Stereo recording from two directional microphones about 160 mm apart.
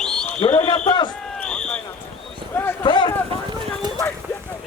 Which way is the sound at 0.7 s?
30° left (ahead or behind).